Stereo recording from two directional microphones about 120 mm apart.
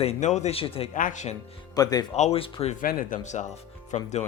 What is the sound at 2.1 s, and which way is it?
Speech, 60° left (ahead or behind).